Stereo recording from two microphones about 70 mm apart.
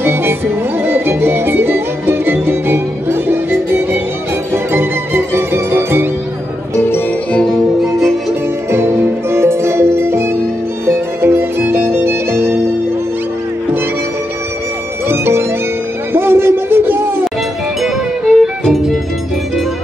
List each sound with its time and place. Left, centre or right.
0.0 s music: right
8.7 s music: right
15.0 s music: right
17.8 s music: centre